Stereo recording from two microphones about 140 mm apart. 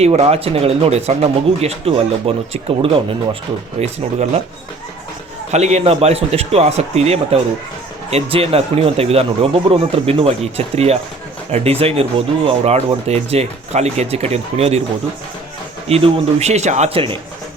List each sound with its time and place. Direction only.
0.0 s speech: 50° right (ahead or behind)
3.8 s speech: 55° right (ahead or behind)
5.5 s speech: 55° right (ahead or behind)
15.9 s speech: 45° right (ahead or behind)